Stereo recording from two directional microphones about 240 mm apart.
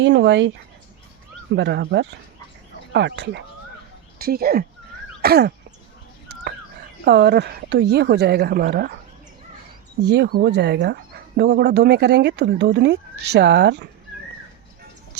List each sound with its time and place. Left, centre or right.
0.0 s speech: right
1.5 s speech: right
5.2 s a sound: right
7.0 s speech: right
10.0 s speech: right